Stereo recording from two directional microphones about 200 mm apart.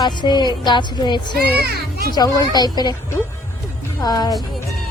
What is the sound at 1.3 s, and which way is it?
Speech, 50° right (ahead or behind).